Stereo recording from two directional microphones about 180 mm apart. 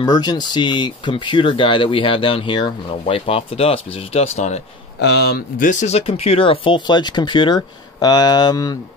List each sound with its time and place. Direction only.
0.0 s speech: 20° left (ahead or behind)
5.0 s speech: 65° left (ahead or behind); by 8.7 s 20° left (ahead or behind)